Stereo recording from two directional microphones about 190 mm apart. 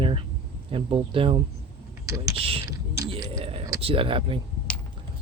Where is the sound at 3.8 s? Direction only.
30° right (ahead or behind).